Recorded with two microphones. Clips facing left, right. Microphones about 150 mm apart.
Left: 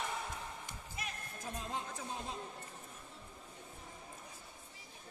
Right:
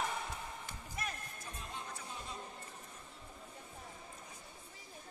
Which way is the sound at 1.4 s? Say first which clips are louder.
Left 11 dB; 90° left.